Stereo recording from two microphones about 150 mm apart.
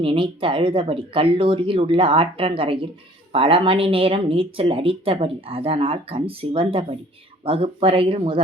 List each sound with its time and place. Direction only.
0.0 s speech: 35° right (ahead or behind)